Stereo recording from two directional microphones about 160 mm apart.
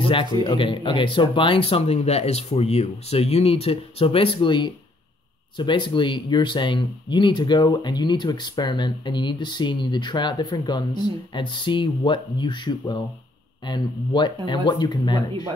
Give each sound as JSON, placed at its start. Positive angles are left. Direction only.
{"t": 0.0, "sound": "speech", "side_deg": 30}